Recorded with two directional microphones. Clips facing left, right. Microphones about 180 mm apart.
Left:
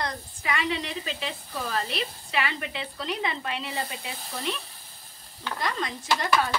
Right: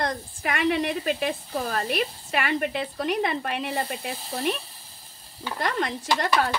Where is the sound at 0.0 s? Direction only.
55° right (ahead or behind).